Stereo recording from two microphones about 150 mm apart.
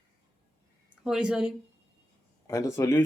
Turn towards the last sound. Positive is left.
turn(degrees=20)  # may be behind; listen again after turning